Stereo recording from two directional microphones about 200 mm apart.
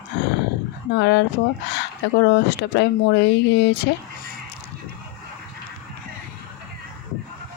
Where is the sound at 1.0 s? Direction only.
60° left (ahead or behind).